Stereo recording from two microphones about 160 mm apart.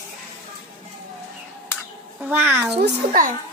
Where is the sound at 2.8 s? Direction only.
60° right (ahead or behind).